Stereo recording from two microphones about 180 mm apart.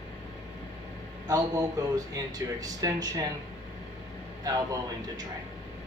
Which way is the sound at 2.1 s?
20° right (ahead or behind).